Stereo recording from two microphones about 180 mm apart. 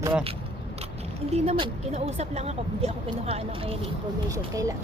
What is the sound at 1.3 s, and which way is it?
Speech, 35° right (ahead or behind).